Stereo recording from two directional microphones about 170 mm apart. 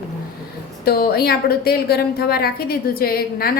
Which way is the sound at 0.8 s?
65° left (ahead or behind).